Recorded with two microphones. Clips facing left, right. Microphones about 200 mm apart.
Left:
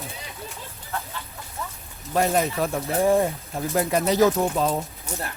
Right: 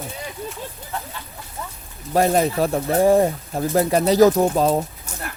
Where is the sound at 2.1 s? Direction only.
35° right (ahead or behind).